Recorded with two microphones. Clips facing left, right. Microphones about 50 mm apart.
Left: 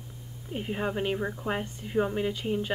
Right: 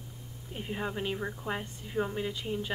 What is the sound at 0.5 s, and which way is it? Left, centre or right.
A woman's voice, centre.